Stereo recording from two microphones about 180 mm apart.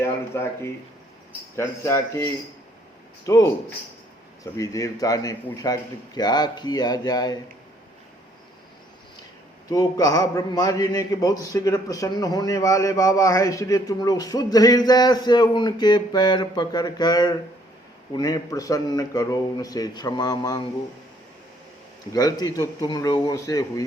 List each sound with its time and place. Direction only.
0.0 s a man's voice: 15° left (ahead or behind)
4.5 s a man's voice: 20° left (ahead or behind)
9.6 s a man's voice: 20° left (ahead or behind)
22.1 s a man's voice: 20° left (ahead or behind)